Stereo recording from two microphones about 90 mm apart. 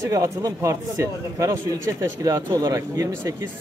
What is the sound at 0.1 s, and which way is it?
A man's voice, 40° right (ahead or behind).